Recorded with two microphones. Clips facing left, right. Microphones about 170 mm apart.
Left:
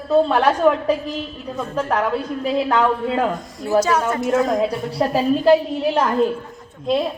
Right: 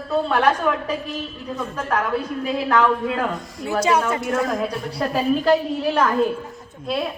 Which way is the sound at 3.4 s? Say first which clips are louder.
Left 2 dB; centre (ahead or behind).